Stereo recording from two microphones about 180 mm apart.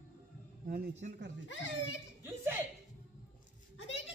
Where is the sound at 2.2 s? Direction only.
10° right (ahead or behind).